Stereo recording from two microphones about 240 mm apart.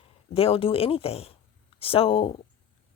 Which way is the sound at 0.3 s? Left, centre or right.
Left.